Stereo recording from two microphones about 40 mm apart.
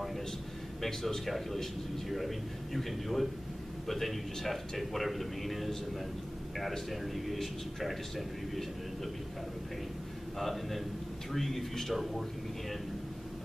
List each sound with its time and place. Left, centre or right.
0.8 s a man's voice: centre
6.9 s a man's voice: centre
10.4 s a man's voice: centre